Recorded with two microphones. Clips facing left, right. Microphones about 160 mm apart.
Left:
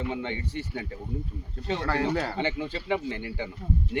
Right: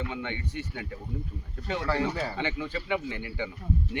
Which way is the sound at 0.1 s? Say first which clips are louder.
Left 3 dB; 30° left (ahead or behind).